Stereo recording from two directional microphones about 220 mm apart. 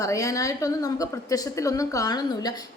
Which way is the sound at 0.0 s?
15° left (ahead or behind).